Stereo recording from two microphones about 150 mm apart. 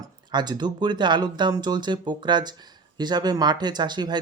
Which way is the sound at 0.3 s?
30° right (ahead or behind).